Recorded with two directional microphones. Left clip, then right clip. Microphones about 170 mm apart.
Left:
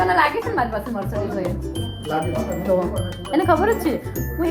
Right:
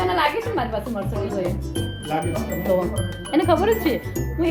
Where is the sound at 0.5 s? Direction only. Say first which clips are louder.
Left 2 dB; centre (ahead or behind).